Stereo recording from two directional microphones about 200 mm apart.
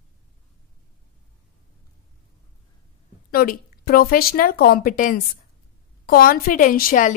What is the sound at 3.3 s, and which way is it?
A woman's voice, 50° left (ahead or behind).